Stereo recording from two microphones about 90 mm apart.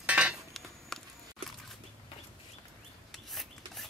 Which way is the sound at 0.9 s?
5° left (ahead or behind).